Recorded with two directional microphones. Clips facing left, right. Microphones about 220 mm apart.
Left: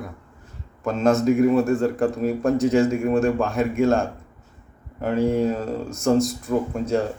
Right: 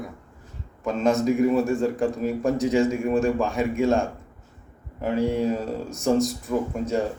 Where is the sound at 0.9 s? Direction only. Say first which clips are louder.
Left 3 dB; centre (ahead or behind).